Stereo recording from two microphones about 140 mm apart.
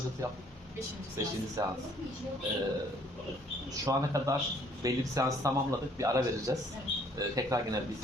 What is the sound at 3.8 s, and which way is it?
Speech, 25° right (ahead or behind).